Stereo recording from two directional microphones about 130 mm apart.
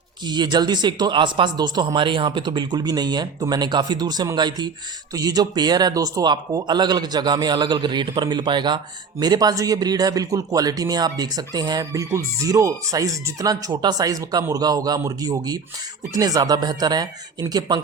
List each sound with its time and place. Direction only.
0.3 s speech: 35° right (ahead or behind)